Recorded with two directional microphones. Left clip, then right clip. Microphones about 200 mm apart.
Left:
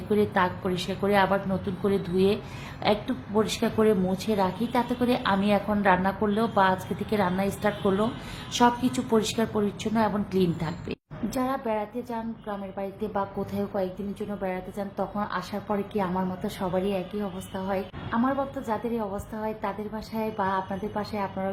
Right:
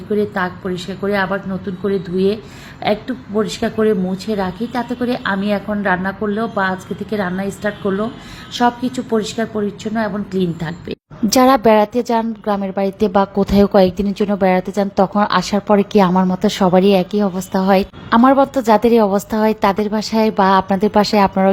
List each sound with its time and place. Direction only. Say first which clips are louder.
0.1 s a woman's voice: right 5 dB; centre (ahead or behind)
11.3 s a woman's voice: right 18 dB; 50° right (ahead or behind)